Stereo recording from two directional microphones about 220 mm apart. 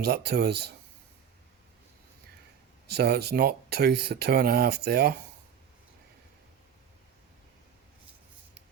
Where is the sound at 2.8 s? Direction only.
45° right (ahead or behind).